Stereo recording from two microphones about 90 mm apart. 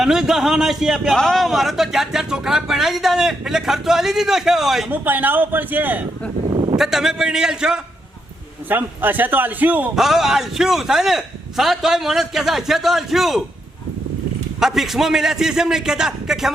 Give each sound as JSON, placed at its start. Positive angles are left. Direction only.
{"t": 0.0, "sound": "a man's voice", "side_deg": -5}
{"t": 4.9, "sound": "a man's voice", "side_deg": -20}
{"t": 6.5, "sound": "a sound", "side_deg": -60}
{"t": 6.7, "sound": "a man's voice", "side_deg": -5}
{"t": 8.7, "sound": "a man's voice", "side_deg": -20}
{"t": 9.9, "sound": "a man's voice", "side_deg": -5}
{"t": 14.6, "sound": "a man's voice", "side_deg": -5}